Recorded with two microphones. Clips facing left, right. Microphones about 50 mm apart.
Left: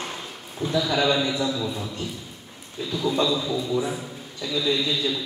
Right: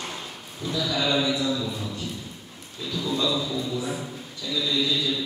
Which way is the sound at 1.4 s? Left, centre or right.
Centre.